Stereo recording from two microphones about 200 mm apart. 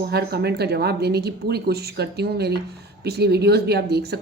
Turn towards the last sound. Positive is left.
turn(degrees=-55)  # may be behind; listen again after turning